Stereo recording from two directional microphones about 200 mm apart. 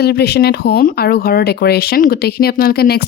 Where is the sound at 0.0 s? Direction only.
55° left (ahead or behind).